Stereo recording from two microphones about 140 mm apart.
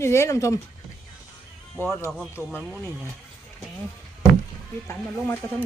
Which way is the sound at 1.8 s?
15° left (ahead or behind).